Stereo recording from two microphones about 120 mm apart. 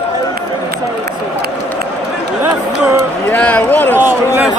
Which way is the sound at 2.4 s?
15° right (ahead or behind).